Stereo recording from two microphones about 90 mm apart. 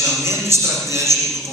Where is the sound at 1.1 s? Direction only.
5° left (ahead or behind).